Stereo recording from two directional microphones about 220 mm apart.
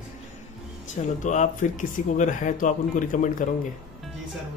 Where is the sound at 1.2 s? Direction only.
35° left (ahead or behind).